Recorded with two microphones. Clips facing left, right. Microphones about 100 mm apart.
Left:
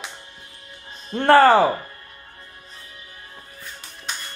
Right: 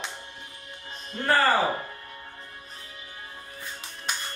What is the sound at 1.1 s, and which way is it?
Speech, 75° left (ahead or behind).